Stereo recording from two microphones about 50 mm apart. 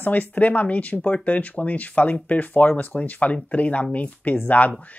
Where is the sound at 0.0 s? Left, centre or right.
Left.